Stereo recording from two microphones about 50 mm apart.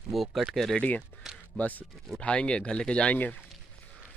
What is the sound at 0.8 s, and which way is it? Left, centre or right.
Speech, left.